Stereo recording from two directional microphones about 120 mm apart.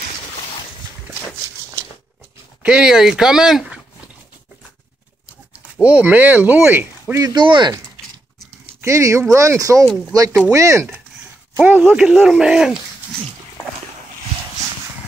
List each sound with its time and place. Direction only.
2.6 s speech: 5° right (ahead or behind)
5.8 s speech: 10° right (ahead or behind)
7.2 s speech: 40° right (ahead or behind)
8.8 s speech: 25° right (ahead or behind)
9.8 s speech: centre (ahead or behind)
10.5 s speech: 25° right (ahead or behind); by 12.7 s 5° right (ahead or behind)